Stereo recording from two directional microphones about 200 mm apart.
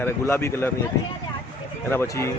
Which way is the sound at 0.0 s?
10° left (ahead or behind).